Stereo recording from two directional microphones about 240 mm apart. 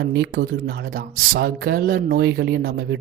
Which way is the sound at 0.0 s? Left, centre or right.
Right.